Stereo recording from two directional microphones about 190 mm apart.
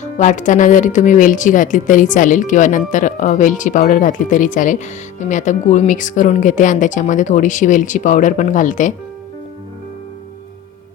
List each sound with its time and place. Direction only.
0.0 s speech: 40° left (ahead or behind)